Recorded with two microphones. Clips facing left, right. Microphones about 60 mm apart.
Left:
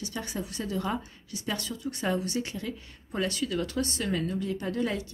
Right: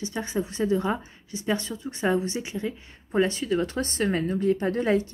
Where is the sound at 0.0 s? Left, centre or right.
Right.